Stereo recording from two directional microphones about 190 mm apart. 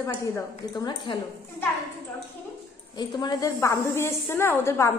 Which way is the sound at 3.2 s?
20° left (ahead or behind).